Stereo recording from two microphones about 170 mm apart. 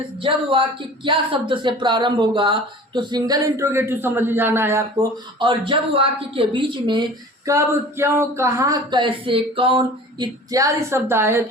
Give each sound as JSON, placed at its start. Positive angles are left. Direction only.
{"t": 0.2, "sound": "speech", "side_deg": -30}
{"t": 5.4, "sound": "speech", "side_deg": -30}
{"t": 10.5, "sound": "a woman's voice", "side_deg": -20}